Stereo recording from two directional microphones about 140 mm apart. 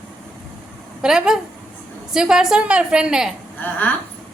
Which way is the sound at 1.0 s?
5° right (ahead or behind).